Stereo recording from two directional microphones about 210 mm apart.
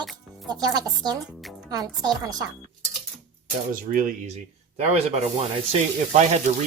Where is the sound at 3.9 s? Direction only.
40° right (ahead or behind).